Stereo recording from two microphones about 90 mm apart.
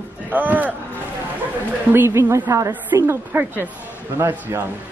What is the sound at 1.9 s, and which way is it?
Speech, 25° right (ahead or behind).